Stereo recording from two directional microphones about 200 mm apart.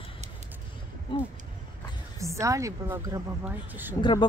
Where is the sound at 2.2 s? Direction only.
15° right (ahead or behind).